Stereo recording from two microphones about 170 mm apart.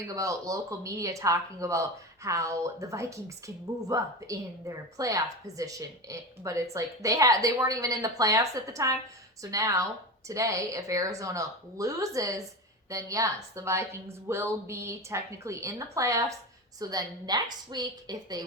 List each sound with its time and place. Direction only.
0.1 s speech: 20° right (ahead or behind)